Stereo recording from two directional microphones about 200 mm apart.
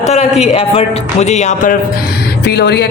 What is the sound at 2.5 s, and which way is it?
Speech, 55° left (ahead or behind).